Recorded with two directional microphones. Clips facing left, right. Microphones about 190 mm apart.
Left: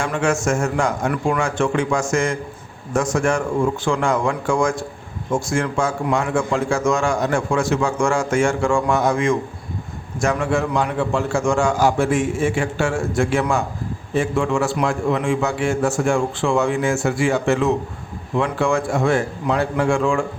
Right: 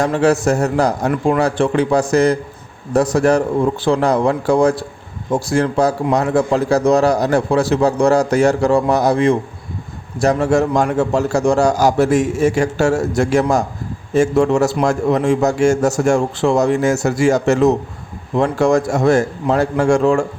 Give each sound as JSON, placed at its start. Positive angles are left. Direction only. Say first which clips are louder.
{"t": 0.0, "sound": "a man's voice", "louder": "right 6 dB", "side_deg": -35}
{"t": 1.1, "sound": "speech", "louder": "right 5 dB", "side_deg": -25}
{"t": 1.4, "sound": "a man's voice", "louder": "right 5 dB", "side_deg": -35}